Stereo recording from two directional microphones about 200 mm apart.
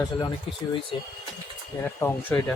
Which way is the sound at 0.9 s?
25° left (ahead or behind).